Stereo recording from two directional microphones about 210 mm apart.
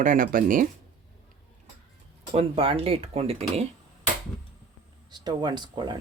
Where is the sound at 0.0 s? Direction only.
40° right (ahead or behind).